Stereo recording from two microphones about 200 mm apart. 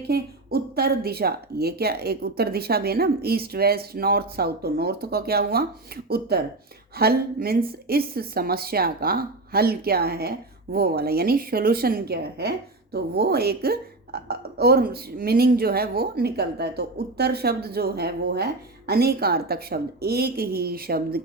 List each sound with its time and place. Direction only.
0.1 s a woman's voice: 50° right (ahead or behind)